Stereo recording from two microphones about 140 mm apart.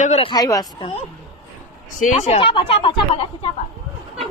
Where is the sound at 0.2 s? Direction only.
35° left (ahead or behind).